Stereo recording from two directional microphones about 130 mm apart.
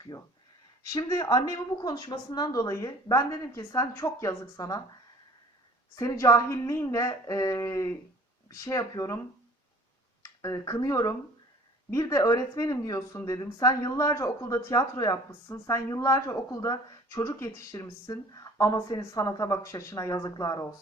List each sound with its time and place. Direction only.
0.9 s speech: 25° left (ahead or behind)
6.0 s speech: 25° left (ahead or behind)
10.4 s speech: 25° left (ahead or behind)